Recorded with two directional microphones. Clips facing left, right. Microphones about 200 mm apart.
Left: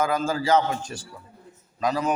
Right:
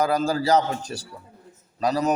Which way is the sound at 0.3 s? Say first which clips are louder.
Right 1 dB; 35° right (ahead or behind).